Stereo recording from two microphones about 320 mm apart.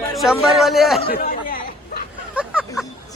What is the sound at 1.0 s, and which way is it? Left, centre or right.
Chatter, left.